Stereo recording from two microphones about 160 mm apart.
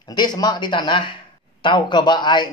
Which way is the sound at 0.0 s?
25° left (ahead or behind).